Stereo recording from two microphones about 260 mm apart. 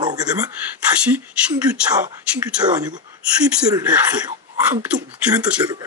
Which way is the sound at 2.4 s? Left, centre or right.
Centre.